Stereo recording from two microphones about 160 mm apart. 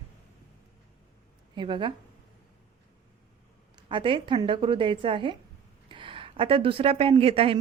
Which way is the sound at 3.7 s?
30° right (ahead or behind).